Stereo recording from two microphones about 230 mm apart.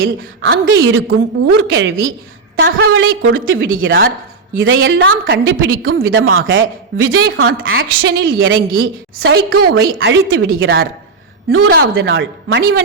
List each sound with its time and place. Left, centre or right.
0.2 s a woman's voice: right
0.6 s a woman's voice: right
11.7 s a woman's voice: right
11.9 s a woman's voice: right